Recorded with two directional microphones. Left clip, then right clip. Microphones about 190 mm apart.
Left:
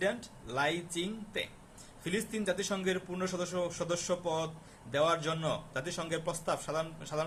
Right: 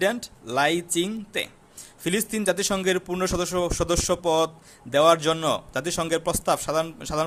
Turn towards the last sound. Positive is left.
turn(degrees=-55)  # may be behind; listen again after turning